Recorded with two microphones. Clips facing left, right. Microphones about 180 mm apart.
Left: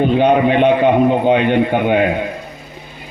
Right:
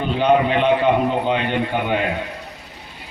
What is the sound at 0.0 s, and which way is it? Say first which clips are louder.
A man's voice: left 5 dB; 50° left (ahead or behind).